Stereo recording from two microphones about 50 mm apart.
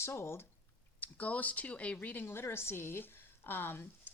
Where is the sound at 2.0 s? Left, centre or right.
Left.